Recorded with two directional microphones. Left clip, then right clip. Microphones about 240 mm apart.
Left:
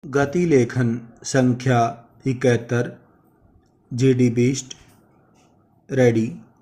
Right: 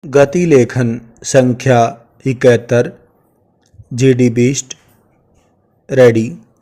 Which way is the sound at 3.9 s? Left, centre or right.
Right.